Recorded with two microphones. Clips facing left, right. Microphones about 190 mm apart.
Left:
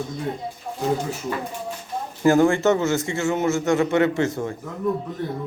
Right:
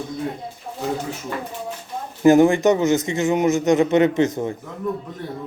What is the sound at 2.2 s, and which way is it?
A man's voice, 20° right (ahead or behind).